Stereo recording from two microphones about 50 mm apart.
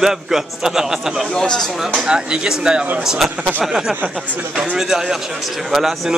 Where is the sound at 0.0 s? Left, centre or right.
Centre.